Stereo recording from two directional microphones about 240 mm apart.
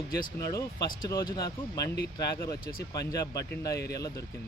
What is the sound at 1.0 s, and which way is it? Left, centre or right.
Speech, centre.